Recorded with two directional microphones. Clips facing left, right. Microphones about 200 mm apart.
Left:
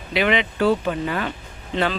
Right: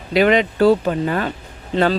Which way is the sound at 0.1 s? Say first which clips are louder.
Right 6 dB; 40° right (ahead or behind).